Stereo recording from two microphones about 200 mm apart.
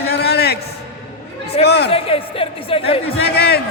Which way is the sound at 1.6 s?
55° left (ahead or behind).